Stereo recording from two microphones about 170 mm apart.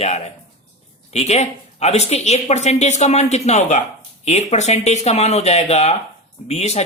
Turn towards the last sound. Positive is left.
turn(degrees=40)  # may be behind; listen again after turning